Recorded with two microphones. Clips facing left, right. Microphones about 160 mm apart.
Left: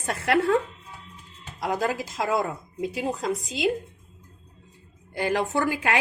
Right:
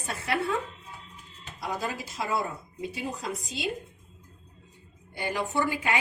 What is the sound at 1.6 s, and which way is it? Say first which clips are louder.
A woman's voice: left 7 dB; 90° left.